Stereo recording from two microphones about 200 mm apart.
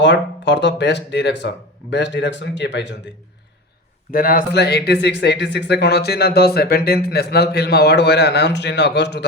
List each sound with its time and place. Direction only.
0.0 s speech: 60° left (ahead or behind)
4.1 s speech: 45° left (ahead or behind)